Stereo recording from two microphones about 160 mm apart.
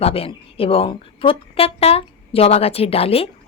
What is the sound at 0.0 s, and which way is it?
A woman's voice, 40° left (ahead or behind).